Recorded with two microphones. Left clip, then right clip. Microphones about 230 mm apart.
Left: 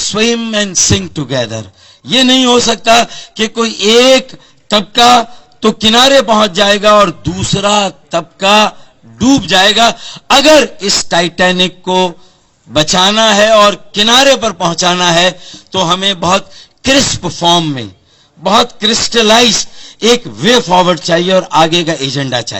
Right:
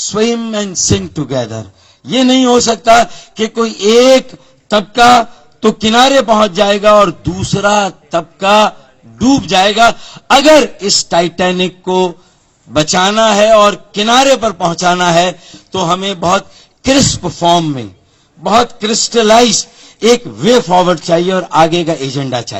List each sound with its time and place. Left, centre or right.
0.1 s a man's voice: left